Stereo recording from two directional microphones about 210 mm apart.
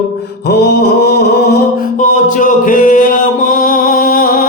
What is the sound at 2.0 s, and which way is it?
Music, 40° left (ahead or behind).